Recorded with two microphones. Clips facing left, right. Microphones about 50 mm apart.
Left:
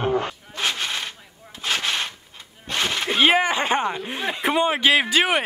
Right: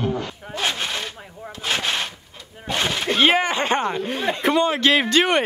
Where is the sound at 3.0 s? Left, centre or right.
Centre.